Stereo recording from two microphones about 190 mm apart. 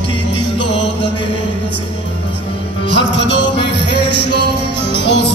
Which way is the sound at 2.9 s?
65° left (ahead or behind).